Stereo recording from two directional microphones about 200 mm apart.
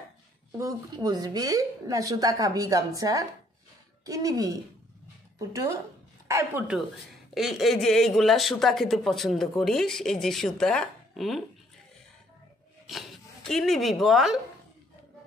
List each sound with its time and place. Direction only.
0.5 s a woman's voice: 20° right (ahead or behind)
6.2 s a woman's voice: 15° right (ahead or behind)
7.3 s speech: centre (ahead or behind)
12.8 s speech: centre (ahead or behind)